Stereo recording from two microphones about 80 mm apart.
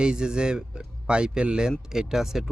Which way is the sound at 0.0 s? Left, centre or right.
Centre.